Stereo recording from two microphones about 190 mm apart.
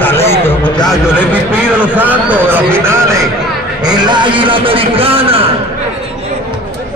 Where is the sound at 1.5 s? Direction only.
10° right (ahead or behind).